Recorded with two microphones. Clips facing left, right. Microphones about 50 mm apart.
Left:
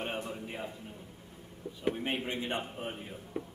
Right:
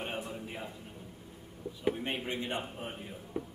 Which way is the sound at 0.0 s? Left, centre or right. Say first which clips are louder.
Left 1 dB; centre.